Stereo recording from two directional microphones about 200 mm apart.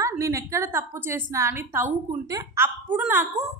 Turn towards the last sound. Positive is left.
turn(degrees=-10)  # may be behind; listen again after turning